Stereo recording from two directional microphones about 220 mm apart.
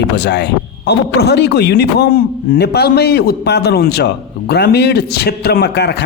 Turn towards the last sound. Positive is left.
turn(degrees=50)  # may be behind; listen again after turning